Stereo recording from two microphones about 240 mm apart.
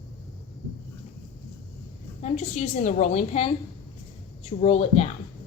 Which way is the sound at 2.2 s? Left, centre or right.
Left.